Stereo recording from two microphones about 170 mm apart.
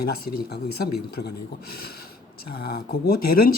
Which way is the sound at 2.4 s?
65° left (ahead or behind).